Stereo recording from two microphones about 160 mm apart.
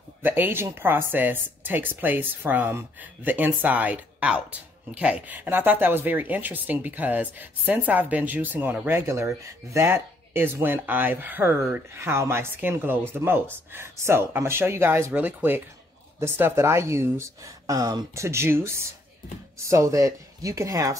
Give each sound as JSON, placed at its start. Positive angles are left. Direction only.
{"t": 0.2, "sound": "speech", "side_deg": -10}